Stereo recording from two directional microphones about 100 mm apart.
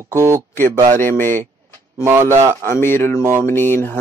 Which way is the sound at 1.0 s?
20° left (ahead or behind).